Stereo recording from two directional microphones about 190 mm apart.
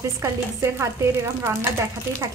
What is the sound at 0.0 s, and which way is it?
Speech, 15° right (ahead or behind).